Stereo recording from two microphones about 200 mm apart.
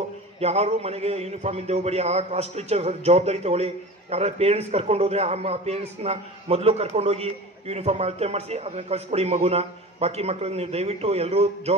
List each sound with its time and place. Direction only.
0.4 s a man's voice: 30° right (ahead or behind)